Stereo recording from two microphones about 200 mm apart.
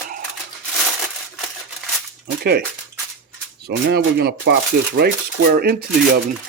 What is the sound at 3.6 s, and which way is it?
Speech, 55° right (ahead or behind).